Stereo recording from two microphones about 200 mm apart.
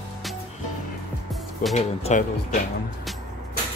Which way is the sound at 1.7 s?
35° left (ahead or behind).